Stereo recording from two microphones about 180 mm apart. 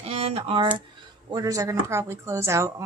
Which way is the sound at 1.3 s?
20° right (ahead or behind).